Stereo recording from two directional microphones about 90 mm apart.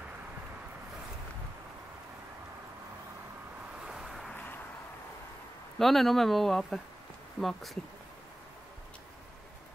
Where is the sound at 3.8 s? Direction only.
5° right (ahead or behind).